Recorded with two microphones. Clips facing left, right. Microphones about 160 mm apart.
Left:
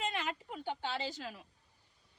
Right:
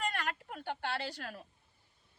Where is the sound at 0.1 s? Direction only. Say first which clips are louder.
Even; 50° right (ahead or behind).